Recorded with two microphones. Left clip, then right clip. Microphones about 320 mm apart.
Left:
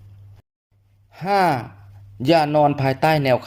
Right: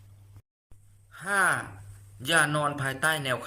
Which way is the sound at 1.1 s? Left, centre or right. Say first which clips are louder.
Left 7 dB; centre.